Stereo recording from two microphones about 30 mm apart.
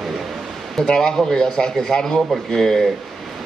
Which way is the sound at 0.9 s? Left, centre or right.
Left.